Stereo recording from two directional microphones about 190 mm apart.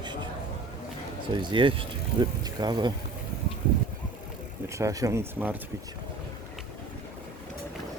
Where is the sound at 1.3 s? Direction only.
25° right (ahead or behind).